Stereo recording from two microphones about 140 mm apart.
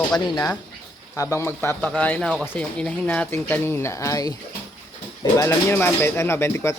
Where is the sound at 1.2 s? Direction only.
20° left (ahead or behind).